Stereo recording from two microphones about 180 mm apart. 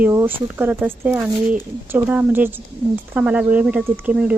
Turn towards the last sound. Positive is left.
turn(degrees=-5)  # may be behind; listen again after turning